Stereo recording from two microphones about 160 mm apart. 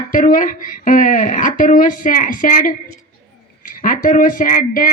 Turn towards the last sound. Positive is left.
turn(degrees=60)  # may be behind; listen again after turning